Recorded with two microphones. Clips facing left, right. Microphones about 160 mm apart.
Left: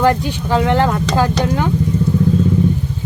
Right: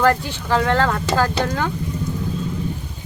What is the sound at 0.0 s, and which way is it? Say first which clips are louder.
Speech: left 3 dB; 15° left (ahead or behind).